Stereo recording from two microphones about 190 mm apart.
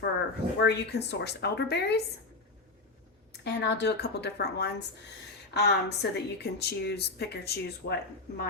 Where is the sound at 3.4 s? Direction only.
60° left (ahead or behind).